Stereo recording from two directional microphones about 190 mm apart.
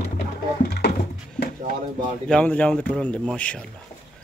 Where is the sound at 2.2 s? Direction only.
5° left (ahead or behind).